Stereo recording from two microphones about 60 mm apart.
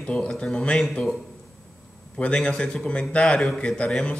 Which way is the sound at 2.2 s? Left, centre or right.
Centre.